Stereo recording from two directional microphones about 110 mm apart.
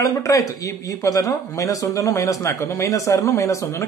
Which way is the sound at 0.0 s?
30° left (ahead or behind).